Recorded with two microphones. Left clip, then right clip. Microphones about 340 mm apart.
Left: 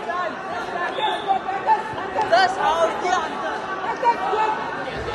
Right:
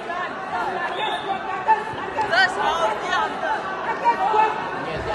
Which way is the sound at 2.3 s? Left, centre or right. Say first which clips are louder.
Left 2 dB; left.